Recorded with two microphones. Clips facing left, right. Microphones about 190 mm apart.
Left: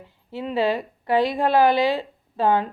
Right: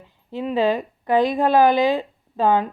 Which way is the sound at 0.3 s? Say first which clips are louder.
Right 2 dB; 15° right (ahead or behind).